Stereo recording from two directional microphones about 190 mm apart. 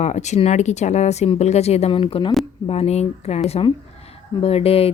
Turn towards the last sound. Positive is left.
turn(degrees=30)  # may be behind; listen again after turning